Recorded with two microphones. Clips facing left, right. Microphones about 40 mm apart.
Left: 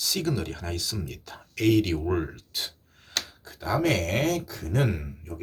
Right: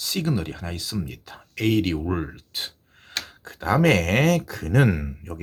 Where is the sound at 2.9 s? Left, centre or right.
Right.